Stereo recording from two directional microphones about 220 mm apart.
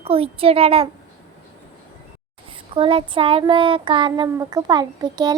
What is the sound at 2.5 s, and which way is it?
Child singing, 25° right (ahead or behind).